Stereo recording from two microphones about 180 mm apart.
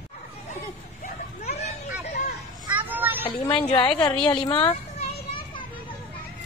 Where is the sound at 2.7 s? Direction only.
10° right (ahead or behind).